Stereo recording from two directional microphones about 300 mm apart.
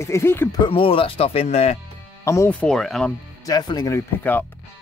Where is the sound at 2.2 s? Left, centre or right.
Centre.